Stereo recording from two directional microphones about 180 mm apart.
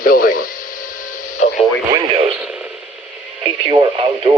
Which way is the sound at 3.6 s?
25° right (ahead or behind).